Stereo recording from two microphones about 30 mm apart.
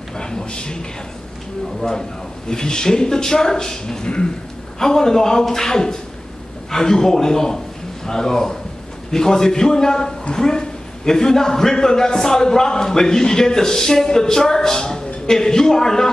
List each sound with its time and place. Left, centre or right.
0.2 s a man's voice: left
1.8 s a man's voice: centre